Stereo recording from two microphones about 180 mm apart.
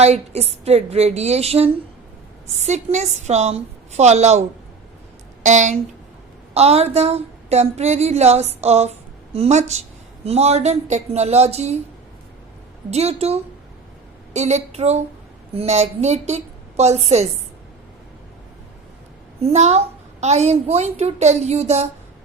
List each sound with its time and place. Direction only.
0.0 s a woman's voice: 35° right (ahead or behind)
5.5 s a woman's voice: 40° right (ahead or behind)
12.9 s a woman's voice: 35° right (ahead or behind)
19.4 s a woman's voice: 35° right (ahead or behind)